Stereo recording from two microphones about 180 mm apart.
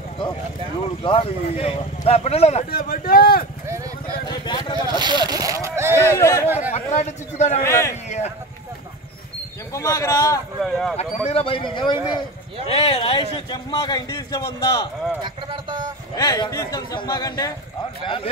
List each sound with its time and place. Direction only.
1.0 s speech: 30° left (ahead or behind)
2.7 s speech: 55° left (ahead or behind)
4.3 s speech: 25° left (ahead or behind)
4.9 s speech: 25° right (ahead or behind)
5.9 s speech: 15° left (ahead or behind)
6.7 s speech: 40° left (ahead or behind)
7.6 s speech: 15° left (ahead or behind)
9.8 s speech: 15° left (ahead or behind)
10.6 s speech: centre (ahead or behind)
11.0 s speech: 35° left (ahead or behind); by 14.9 s 20° left (ahead or behind)
16.2 s speech: 20° left (ahead or behind)